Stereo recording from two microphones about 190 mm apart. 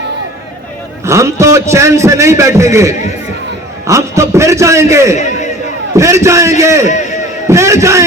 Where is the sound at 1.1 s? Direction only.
15° right (ahead or behind).